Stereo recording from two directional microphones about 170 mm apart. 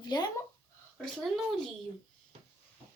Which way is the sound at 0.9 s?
Centre (ahead or behind).